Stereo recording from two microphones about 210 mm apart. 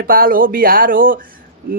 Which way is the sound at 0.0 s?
45° right (ahead or behind).